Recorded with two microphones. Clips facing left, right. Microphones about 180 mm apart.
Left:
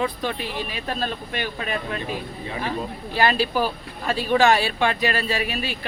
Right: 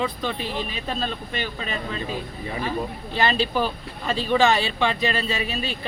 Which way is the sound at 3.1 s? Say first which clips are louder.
Left 1 dB; 10° left (ahead or behind).